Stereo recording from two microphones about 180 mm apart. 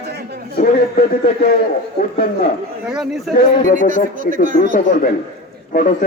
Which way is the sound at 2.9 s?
Centre (ahead or behind).